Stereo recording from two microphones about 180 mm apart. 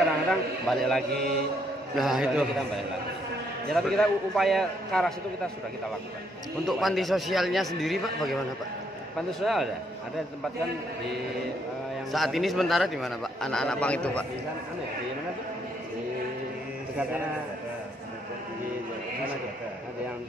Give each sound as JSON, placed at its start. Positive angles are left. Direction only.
{"t": 0.3, "sound": "a man's voice", "side_deg": 0}
{"t": 3.7, "sound": "a man's voice", "side_deg": 0}
{"t": 6.6, "sound": "a man's voice", "side_deg": 0}
{"t": 9.4, "sound": "a man's voice", "side_deg": 0}
{"t": 12.1, "sound": "a man's voice", "side_deg": 0}